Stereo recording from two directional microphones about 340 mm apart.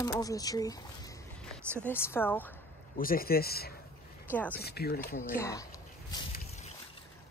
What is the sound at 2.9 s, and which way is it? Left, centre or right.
A man's voice, left.